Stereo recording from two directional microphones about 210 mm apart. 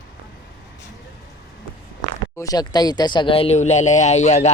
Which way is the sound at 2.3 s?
15° left (ahead or behind).